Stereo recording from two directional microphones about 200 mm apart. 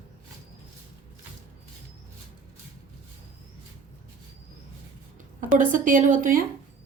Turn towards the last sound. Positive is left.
turn(degrees=-40)  # may be behind; listen again after turning